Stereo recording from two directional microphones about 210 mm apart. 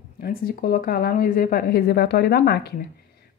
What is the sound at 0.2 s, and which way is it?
Speech, 45° left (ahead or behind).